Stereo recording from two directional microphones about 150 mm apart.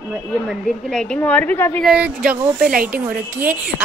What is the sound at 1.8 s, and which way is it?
Speech, 5° right (ahead or behind).